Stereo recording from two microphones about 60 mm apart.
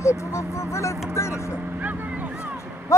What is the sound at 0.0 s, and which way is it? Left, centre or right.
Speech, left.